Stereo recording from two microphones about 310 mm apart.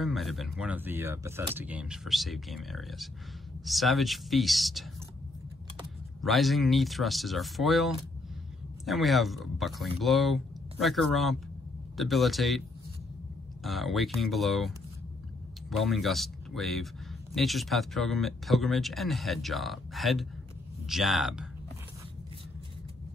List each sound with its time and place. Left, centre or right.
0.0 s a man's voice: centre
6.2 s a man's voice: centre
13.7 s a man's voice: centre
15.7 s a man's voice: centre